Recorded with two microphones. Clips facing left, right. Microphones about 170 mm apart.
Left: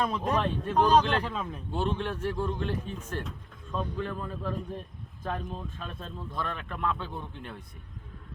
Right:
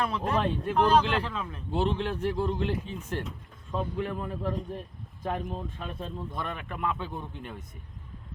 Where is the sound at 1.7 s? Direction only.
15° right (ahead or behind).